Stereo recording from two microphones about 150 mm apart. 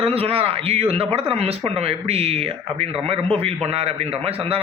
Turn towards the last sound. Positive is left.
turn(degrees=-40)  # may be behind; listen again after turning